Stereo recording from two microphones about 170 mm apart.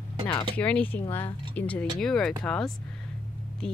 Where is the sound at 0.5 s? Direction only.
10° left (ahead or behind).